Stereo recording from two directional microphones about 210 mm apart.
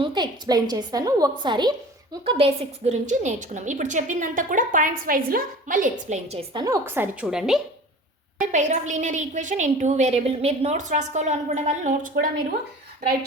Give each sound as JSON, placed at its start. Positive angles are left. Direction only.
{"t": 0.0, "sound": "a woman's voice", "side_deg": -20}
{"t": 6.5, "sound": "a woman's voice", "side_deg": -20}
{"t": 8.4, "sound": "a woman's voice", "side_deg": -35}